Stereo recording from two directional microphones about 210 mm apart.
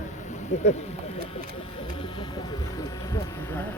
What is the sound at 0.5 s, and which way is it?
Speech, 35° left (ahead or behind).